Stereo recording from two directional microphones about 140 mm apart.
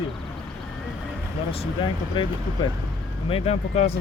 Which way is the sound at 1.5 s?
40° left (ahead or behind).